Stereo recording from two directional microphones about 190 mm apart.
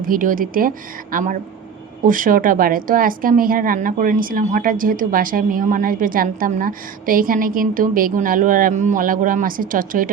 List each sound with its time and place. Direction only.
0.0 s speech: 45° right (ahead or behind)